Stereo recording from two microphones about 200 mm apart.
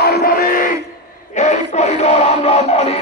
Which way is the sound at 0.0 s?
50° left (ahead or behind).